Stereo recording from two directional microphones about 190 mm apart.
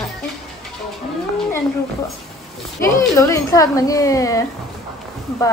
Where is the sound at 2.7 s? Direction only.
15° left (ahead or behind).